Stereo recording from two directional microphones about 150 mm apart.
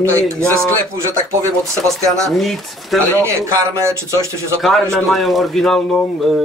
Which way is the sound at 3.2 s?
20° right (ahead or behind).